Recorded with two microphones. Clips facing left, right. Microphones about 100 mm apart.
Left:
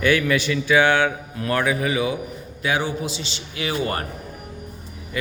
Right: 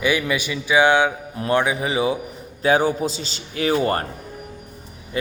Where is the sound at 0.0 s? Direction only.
15° right (ahead or behind).